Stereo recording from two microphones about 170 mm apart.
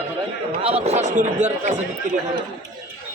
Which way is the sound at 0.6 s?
35° right (ahead or behind).